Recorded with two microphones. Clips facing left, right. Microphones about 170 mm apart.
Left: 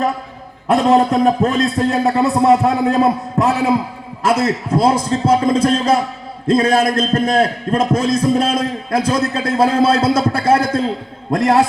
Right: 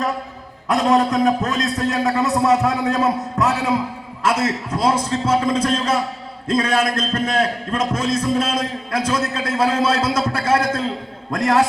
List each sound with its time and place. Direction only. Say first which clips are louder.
0.7 s a man's voice: left 4 dB; 30° left (ahead or behind)